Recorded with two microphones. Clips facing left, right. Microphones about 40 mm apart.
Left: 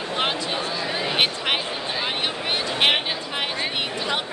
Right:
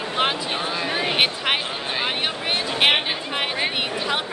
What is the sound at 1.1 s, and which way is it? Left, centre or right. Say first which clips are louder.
Speech: even; centre.